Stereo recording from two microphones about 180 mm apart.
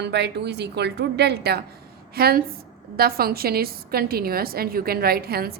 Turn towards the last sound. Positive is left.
turn(degrees=-60)  # may be behind; listen again after turning